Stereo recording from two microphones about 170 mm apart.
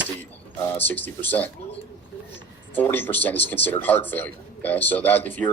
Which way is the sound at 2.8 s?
10° left (ahead or behind).